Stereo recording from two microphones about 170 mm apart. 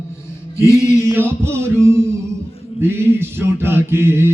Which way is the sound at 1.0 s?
15° right (ahead or behind).